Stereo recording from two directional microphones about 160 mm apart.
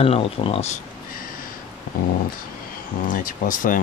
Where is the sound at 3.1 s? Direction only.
60° left (ahead or behind).